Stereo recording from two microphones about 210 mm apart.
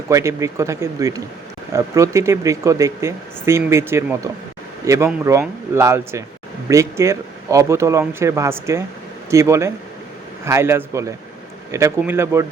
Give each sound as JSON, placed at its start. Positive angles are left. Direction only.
{"t": 0.1, "sound": "speech", "side_deg": -15}